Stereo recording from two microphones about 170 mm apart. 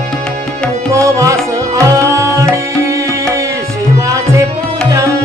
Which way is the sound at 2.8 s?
15° right (ahead or behind).